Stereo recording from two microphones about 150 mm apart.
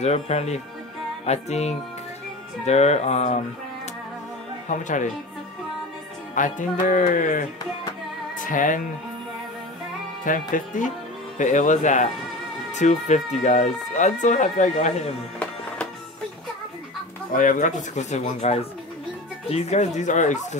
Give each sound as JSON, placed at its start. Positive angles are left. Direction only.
{"t": 0.0, "sound": "speech", "side_deg": 45}
{"t": 4.6, "sound": "music", "side_deg": 55}
{"t": 6.3, "sound": "music", "side_deg": 60}
{"t": 8.5, "sound": "music", "side_deg": 60}
{"t": 10.2, "sound": "music", "side_deg": 60}
{"t": 12.7, "sound": "speech", "side_deg": 50}
{"t": 17.3, "sound": "music", "side_deg": 60}
{"t": 17.9, "sound": "speech", "side_deg": 50}